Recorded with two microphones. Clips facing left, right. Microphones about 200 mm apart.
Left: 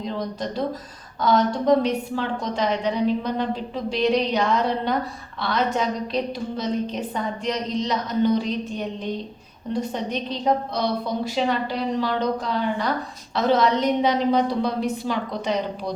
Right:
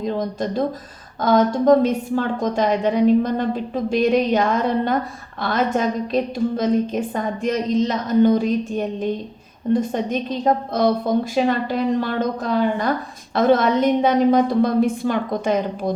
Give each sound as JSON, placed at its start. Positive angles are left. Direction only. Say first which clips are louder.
{"t": 0.0, "sound": "a woman's voice", "louder": "right 5 dB", "side_deg": -45}